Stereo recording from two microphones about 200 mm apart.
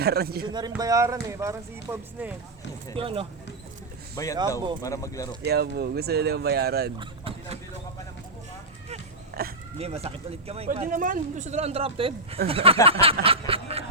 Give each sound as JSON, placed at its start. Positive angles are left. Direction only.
{"t": 0.0, "sound": "speech", "side_deg": -50}
{"t": 0.4, "sound": "speech", "side_deg": -20}
{"t": 2.9, "sound": "speech", "side_deg": -25}
{"t": 4.1, "sound": "speech", "side_deg": 15}
{"t": 5.5, "sound": "speech", "side_deg": -55}
{"t": 7.0, "sound": "a sound", "side_deg": -25}
{"t": 9.4, "sound": "speech", "side_deg": -50}
{"t": 9.7, "sound": "speech", "side_deg": -30}
{"t": 10.8, "sound": "speech", "side_deg": -40}
{"t": 12.8, "sound": "a sound", "side_deg": -30}